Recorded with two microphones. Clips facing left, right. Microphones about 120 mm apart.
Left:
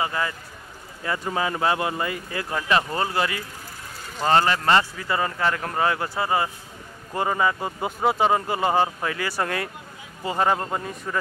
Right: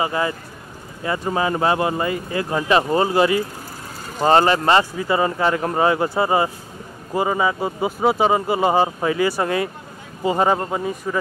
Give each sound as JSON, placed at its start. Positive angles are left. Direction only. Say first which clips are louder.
{"t": 0.0, "sound": "speech", "louder": "right 5 dB", "side_deg": -20}
{"t": 7.2, "sound": "speech", "louder": "right 3 dB", "side_deg": -10}